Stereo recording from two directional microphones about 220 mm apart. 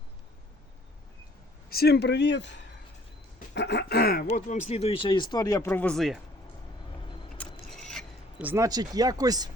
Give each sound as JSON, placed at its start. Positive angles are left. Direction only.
{"t": 1.7, "sound": "speech", "side_deg": 45}
{"t": 7.4, "sound": "scrape", "side_deg": 5}
{"t": 7.8, "sound": "a sound", "side_deg": 0}
{"t": 8.4, "sound": "speech", "side_deg": -15}